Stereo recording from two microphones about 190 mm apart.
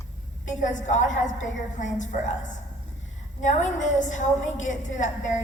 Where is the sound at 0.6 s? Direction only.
40° left (ahead or behind).